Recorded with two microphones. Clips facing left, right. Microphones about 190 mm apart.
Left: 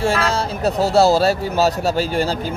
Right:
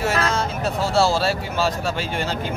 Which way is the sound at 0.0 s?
30° left (ahead or behind).